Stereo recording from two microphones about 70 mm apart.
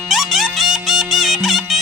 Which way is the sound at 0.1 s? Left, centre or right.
Centre.